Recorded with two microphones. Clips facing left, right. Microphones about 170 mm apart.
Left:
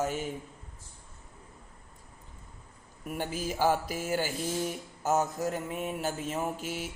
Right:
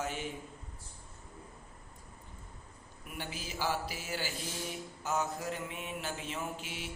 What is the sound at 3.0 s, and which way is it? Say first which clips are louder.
Mantra: left 9 dB; 45° left (ahead or behind).